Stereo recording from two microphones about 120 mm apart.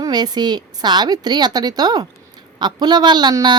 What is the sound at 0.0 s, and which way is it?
Speech, 35° right (ahead or behind).